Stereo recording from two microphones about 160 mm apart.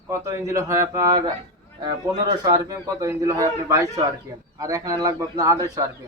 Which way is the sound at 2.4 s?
25° right (ahead or behind).